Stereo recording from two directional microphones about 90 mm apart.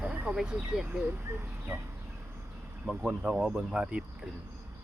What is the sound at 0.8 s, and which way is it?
Speech, 20° right (ahead or behind).